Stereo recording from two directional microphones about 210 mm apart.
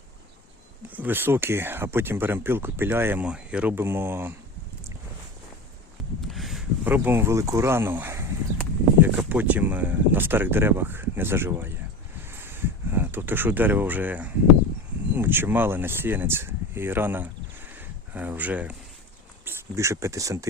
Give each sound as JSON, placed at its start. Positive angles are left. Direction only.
{"t": 0.9, "sound": "speech", "side_deg": -10}
{"t": 6.2, "sound": "speech", "side_deg": 0}
{"t": 12.3, "sound": "a sound", "side_deg": -10}
{"t": 15.1, "sound": "speech", "side_deg": -10}